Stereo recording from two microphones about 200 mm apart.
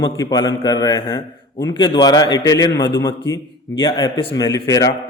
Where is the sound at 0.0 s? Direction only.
20° left (ahead or behind).